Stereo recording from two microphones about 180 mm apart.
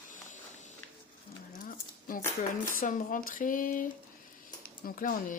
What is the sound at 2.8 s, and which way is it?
Speech, 50° left (ahead or behind).